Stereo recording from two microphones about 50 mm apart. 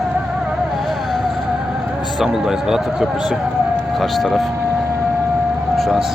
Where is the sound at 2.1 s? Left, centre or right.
Centre.